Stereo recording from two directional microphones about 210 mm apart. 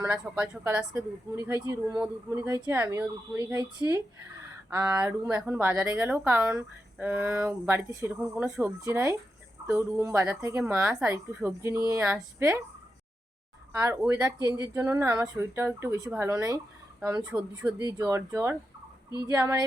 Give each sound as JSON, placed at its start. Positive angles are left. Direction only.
{"t": 0.0, "sound": "speech", "side_deg": -5}
{"t": 13.7, "sound": "speech", "side_deg": -15}